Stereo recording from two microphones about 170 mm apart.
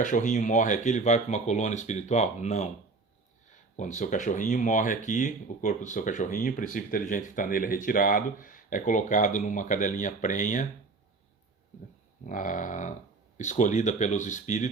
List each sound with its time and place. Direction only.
0.0 s speech: 50° left (ahead or behind)
12.2 s speech: 50° left (ahead or behind)